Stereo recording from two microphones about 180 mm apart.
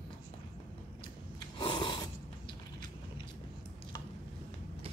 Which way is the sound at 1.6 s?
25° left (ahead or behind).